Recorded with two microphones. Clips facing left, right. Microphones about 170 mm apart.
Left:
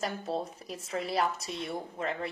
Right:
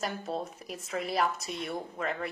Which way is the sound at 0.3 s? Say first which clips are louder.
Left 1 dB; 30° left (ahead or behind).